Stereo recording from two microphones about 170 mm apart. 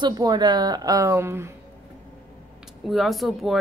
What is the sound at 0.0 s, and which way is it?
A woman's voice, 25° right (ahead or behind).